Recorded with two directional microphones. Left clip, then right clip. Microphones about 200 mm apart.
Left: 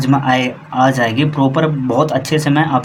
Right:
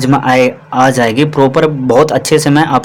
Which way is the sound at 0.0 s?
35° right (ahead or behind).